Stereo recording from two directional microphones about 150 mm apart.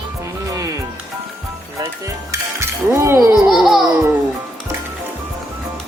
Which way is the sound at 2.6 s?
20° right (ahead or behind).